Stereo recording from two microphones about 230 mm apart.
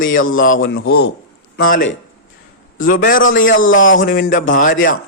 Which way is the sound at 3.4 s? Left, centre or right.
Left.